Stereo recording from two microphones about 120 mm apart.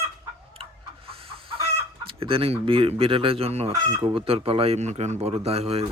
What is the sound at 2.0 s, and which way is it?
Speech, 50° right (ahead or behind).